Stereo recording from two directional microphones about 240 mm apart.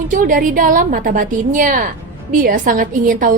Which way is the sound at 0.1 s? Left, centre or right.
Right.